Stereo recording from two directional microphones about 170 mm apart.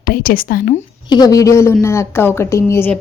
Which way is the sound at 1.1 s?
20° left (ahead or behind).